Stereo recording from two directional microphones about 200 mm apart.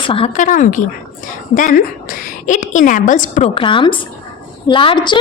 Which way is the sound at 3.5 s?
25° left (ahead or behind).